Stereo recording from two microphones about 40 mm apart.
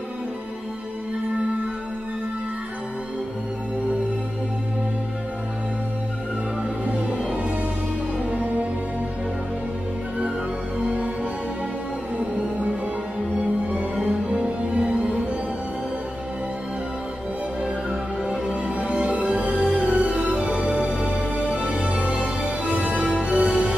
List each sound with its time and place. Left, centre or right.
6.8 s music: right
13.4 s music: right
18.2 s music: right